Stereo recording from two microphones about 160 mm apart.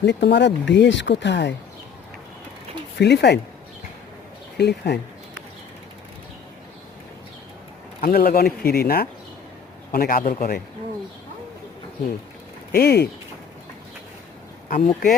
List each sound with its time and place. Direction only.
0.0 s speech: 90° left
3.0 s speech: 90° left
4.5 s speech: 90° left
8.0 s speech: 70° left (ahead or behind)
9.9 s a man's voice: 65° left (ahead or behind)
12.7 s speech: 85° left
14.7 s a man's voice: 60° left (ahead or behind)